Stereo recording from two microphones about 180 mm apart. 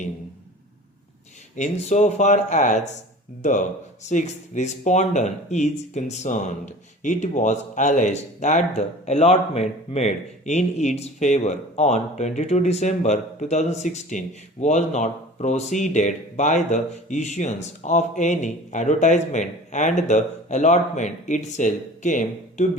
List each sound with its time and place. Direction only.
1.5 s speech: 40° left (ahead or behind)